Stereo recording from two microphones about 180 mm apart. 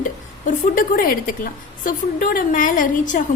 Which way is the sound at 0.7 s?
55° left (ahead or behind).